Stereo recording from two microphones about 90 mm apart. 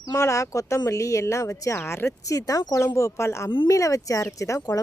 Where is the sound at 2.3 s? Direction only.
40° left (ahead or behind).